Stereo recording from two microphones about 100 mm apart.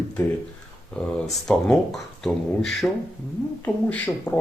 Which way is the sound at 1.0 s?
5° left (ahead or behind).